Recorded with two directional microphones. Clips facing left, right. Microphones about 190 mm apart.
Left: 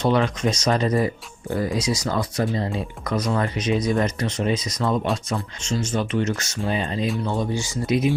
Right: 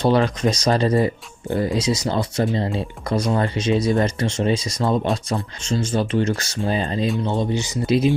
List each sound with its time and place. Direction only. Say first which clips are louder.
0.0 s speech: right 3 dB; 35° right (ahead or behind)
7.3 s speech: right 3 dB; 20° right (ahead or behind)